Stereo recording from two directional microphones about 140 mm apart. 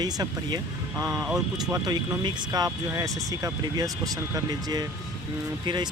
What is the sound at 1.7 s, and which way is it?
Speech, 25° right (ahead or behind).